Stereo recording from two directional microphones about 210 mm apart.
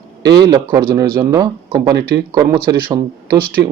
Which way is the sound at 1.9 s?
50° right (ahead or behind).